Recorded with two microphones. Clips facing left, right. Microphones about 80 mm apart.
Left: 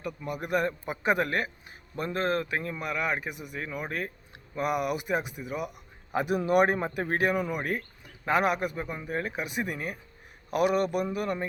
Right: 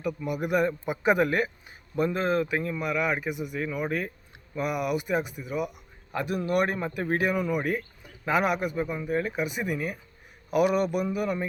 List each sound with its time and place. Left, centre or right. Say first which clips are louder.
0.3 s speech: right 2 dB; centre
6.1 s speech: left 2 dB; centre
6.9 s speech: right 1 dB; centre
7.3 s speech: right 3 dB; centre
7.6 s speech: right 3 dB; centre